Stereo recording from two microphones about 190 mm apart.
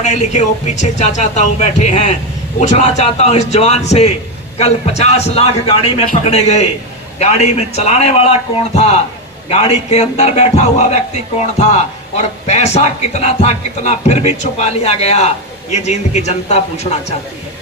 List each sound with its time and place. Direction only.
0.0 s speech: 40° left (ahead or behind)
9.5 s speech: 35° left (ahead or behind)
12.1 s speech: 35° left (ahead or behind)